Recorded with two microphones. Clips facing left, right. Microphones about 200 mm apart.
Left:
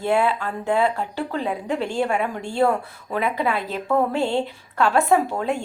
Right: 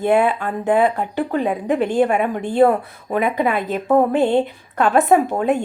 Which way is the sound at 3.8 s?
35° right (ahead or behind).